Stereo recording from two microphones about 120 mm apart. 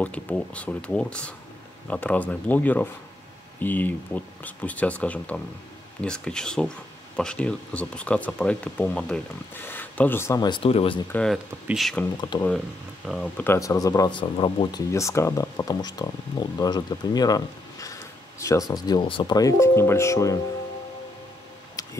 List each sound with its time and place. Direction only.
0.0 s speech: 10° left (ahead or behind)
10.6 s speech: 55° left (ahead or behind)
11.1 s speech: 10° left (ahead or behind)
11.3 s speech: 5° right (ahead or behind)
12.3 s speech: 40° left (ahead or behind)
13.2 s speech: 15° left (ahead or behind)
13.6 s speech: 30° left (ahead or behind)
14.1 s speech: 45° left (ahead or behind)
14.9 s speech: 25° left (ahead or behind); by 19.3 s 45° left (ahead or behind)
19.3 s speech: 25° left (ahead or behind)
21.8 s a sound: 30° left (ahead or behind)